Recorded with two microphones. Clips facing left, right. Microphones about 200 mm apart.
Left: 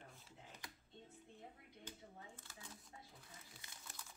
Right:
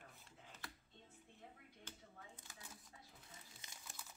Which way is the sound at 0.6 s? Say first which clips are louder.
Right 4 dB; 15° left (ahead or behind).